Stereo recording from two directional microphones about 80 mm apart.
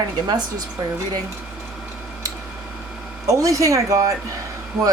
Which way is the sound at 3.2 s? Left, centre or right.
Right.